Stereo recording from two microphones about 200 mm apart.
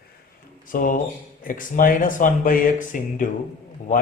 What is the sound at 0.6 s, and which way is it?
A man's voice, 45° left (ahead or behind).